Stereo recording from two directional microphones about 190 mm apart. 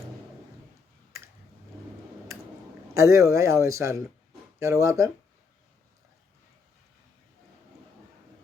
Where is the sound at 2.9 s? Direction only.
15° right (ahead or behind).